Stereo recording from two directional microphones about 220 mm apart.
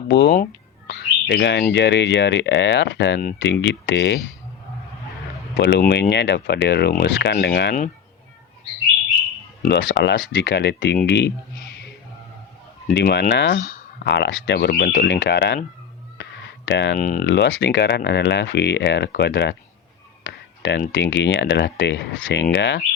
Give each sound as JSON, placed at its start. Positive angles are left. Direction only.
{"t": 0.1, "sound": "speech", "side_deg": 50}
{"t": 5.5, "sound": "speech", "side_deg": 50}
{"t": 9.6, "sound": "speech", "side_deg": 50}
{"t": 12.9, "sound": "speech", "side_deg": 50}
{"t": 16.6, "sound": "speech", "side_deg": 55}
{"t": 17.0, "sound": "speech", "side_deg": 35}
{"t": 17.2, "sound": "speech", "side_deg": 55}
{"t": 20.6, "sound": "a sound", "side_deg": 55}
{"t": 20.9, "sound": "speech", "side_deg": 55}